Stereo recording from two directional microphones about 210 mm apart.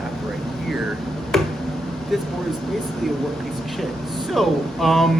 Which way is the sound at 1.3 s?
Centre (ahead or behind).